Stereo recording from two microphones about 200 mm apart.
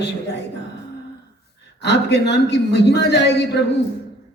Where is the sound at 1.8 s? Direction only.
60° left (ahead or behind).